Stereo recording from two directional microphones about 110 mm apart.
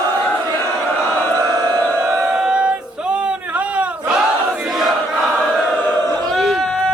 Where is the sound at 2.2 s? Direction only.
5° right (ahead or behind).